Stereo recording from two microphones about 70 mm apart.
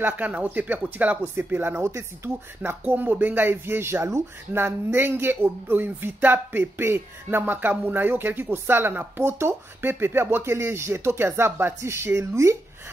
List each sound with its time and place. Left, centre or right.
0.0 s speech: right